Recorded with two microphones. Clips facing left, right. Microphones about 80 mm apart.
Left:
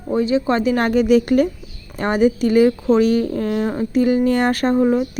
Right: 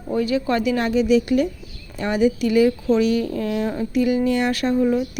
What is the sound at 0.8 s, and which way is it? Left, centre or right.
A woman's voice, left.